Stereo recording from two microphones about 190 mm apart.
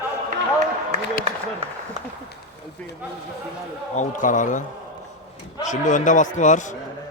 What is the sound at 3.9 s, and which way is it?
Speech, 40° left (ahead or behind).